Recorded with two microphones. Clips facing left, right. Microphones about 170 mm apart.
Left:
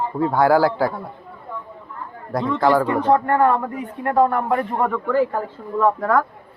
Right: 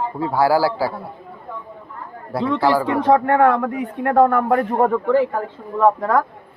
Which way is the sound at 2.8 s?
70° right (ahead or behind).